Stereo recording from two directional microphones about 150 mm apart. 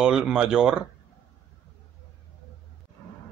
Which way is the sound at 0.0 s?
5° right (ahead or behind).